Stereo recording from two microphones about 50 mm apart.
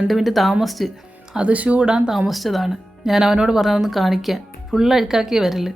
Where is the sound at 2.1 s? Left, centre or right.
Centre.